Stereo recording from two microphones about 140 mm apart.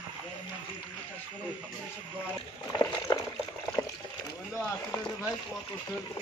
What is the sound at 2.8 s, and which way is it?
Boiling, 25° left (ahead or behind).